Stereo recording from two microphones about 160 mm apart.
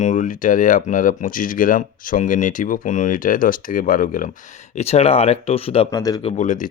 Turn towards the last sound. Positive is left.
turn(degrees=50)  # may be behind; listen again after turning